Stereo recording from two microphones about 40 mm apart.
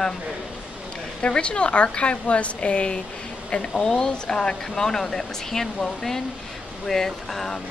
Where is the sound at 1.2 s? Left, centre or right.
Left.